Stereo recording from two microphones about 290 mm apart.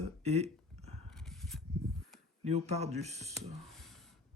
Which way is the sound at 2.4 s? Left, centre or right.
Right.